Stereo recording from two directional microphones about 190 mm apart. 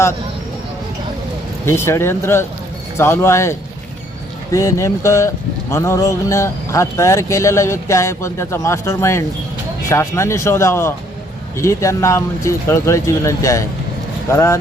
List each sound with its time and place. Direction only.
1.6 s speech: 15° left (ahead or behind)
4.5 s speech: 15° left (ahead or behind)